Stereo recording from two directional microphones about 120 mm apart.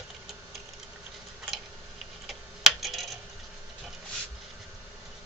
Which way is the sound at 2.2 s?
Centre (ahead or behind).